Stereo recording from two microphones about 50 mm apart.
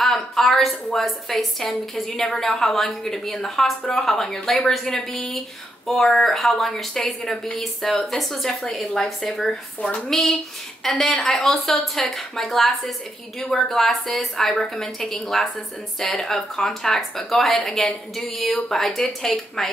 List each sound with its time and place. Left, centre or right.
0.0 s a woman's voice: centre